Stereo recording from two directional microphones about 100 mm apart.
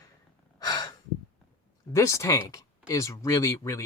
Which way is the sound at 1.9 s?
30° left (ahead or behind).